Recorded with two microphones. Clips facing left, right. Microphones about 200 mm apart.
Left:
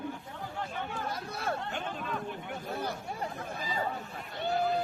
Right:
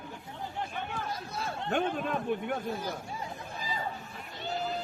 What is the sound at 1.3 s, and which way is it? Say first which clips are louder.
Speech: left 6 dB; 60° left (ahead or behind).